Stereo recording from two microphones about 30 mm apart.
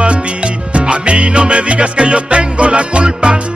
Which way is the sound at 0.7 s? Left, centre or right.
Right.